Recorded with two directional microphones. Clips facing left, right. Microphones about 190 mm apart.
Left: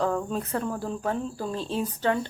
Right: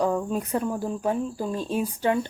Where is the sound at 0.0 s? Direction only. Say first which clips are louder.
Right 2 dB; 15° right (ahead or behind).